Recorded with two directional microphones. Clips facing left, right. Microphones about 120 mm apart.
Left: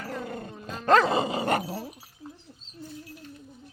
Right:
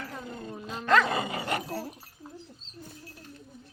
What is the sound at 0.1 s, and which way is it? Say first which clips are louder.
Dog: left 4 dB; 70° left (ahead or behind).